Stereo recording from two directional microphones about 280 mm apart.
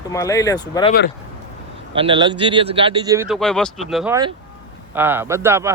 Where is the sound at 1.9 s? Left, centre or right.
Centre.